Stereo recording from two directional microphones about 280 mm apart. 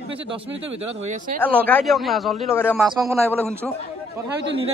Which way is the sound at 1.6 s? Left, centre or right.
Centre.